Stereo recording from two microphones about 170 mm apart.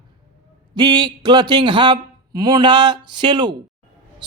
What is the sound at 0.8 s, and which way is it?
Speech, 25° right (ahead or behind).